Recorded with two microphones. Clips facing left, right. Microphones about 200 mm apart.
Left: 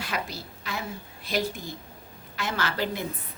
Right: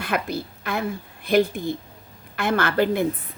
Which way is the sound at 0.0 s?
55° right (ahead or behind).